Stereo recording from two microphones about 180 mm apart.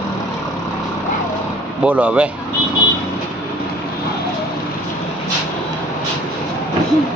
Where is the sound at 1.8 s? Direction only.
10° right (ahead or behind).